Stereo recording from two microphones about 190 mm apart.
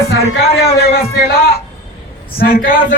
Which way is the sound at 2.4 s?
50° left (ahead or behind).